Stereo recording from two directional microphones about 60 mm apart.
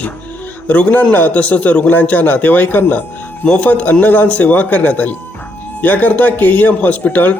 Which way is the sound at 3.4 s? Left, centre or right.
Centre.